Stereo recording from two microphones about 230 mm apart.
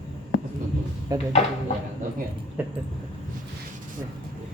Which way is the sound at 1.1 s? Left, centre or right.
Centre.